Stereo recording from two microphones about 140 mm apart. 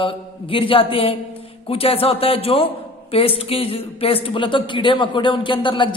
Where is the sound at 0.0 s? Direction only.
40° left (ahead or behind).